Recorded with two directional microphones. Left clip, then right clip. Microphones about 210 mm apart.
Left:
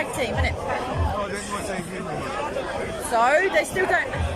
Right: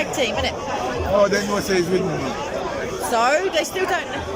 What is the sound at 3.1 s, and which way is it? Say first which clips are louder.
Speech: even; 5° right (ahead or behind).